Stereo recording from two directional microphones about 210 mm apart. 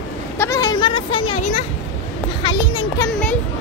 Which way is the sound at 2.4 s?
20° left (ahead or behind).